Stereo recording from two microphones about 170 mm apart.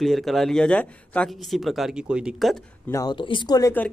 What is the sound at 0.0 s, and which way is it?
Speech, centre (ahead or behind).